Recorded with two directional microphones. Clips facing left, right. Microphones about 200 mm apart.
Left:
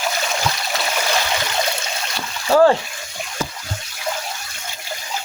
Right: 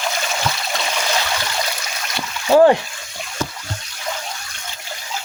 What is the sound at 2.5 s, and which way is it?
Speech, 20° right (ahead or behind).